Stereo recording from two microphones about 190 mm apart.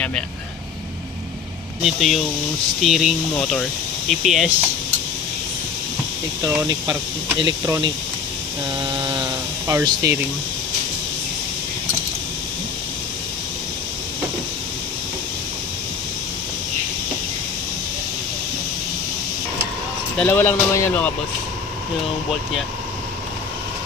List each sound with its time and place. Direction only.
0.0 s speech: 5° left (ahead or behind)
1.8 s speech: centre (ahead or behind)
6.4 s speech: 15° right (ahead or behind)
20.1 s speech: 10° left (ahead or behind)